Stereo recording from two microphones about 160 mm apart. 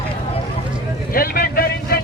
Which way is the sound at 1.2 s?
70° left (ahead or behind).